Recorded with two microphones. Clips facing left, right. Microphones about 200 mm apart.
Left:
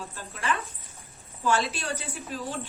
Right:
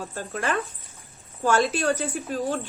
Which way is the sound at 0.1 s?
45° right (ahead or behind).